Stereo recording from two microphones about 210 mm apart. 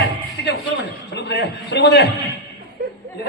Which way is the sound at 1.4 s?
55° left (ahead or behind).